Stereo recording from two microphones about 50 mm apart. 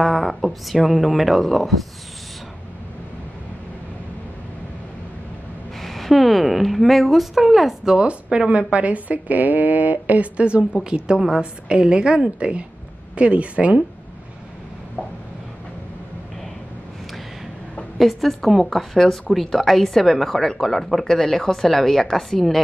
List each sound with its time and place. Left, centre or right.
0.0 s speech: centre
5.8 s speech: centre
8.0 s speech: centre
11.1 s a woman's voice: centre; by 13.8 s right
17.9 s speech: centre